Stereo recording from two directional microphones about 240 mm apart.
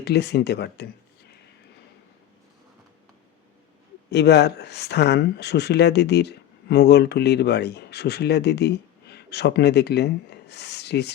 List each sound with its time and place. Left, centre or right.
0.0 s speech: left
4.1 s speech: left